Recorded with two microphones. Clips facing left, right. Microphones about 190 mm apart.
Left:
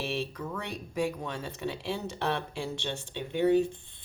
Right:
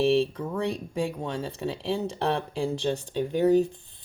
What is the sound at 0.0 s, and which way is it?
Speech, 30° right (ahead or behind).